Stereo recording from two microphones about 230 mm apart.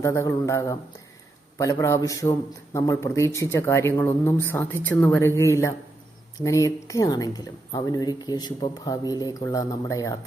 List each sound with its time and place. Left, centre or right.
0.0 s speech: centre